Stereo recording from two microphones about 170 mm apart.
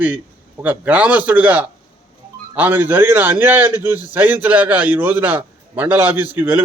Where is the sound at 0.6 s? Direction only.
10° right (ahead or behind).